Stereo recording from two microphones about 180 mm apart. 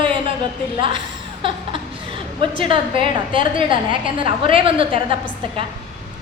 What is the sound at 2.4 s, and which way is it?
A woman's voice, 30° right (ahead or behind).